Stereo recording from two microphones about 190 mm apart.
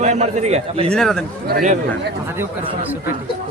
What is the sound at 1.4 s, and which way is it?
Speech, 45° right (ahead or behind).